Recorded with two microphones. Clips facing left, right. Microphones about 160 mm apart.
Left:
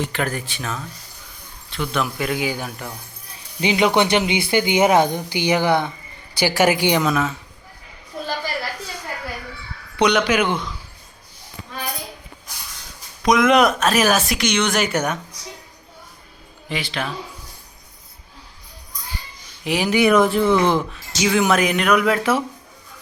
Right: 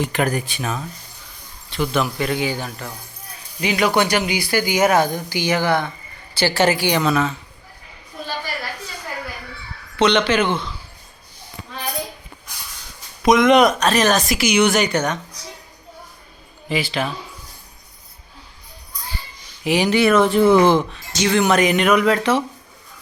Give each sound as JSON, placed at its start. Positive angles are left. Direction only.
{"t": 0.0, "sound": "speech", "side_deg": -15}
{"t": 1.7, "sound": "speech", "side_deg": 0}
{"t": 3.6, "sound": "a woman's voice", "side_deg": 25}
{"t": 7.1, "sound": "a woman's voice", "side_deg": 5}
{"t": 10.0, "sound": "a woman's voice", "side_deg": 10}
{"t": 13.2, "sound": "speech", "side_deg": 0}
{"t": 14.3, "sound": "speech", "side_deg": -10}
{"t": 14.8, "sound": "a woman's voice", "side_deg": 10}
{"t": 16.6, "sound": "speech", "side_deg": -5}
{"t": 19.6, "sound": "speech", "side_deg": 0}
{"t": 20.0, "sound": "a woman's voice", "side_deg": 15}
{"t": 20.7, "sound": "speech", "side_deg": 0}